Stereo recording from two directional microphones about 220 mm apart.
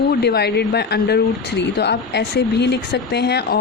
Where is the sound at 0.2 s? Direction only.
50° left (ahead or behind).